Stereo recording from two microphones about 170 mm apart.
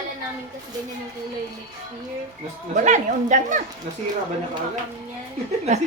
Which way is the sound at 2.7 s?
45° right (ahead or behind).